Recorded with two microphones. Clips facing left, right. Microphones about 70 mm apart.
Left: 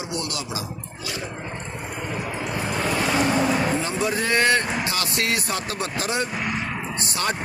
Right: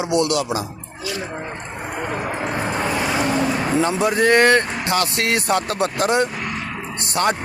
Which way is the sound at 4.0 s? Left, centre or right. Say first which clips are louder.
Right 7 dB; right.